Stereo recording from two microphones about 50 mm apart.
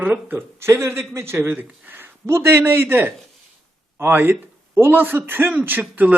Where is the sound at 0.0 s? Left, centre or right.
Right.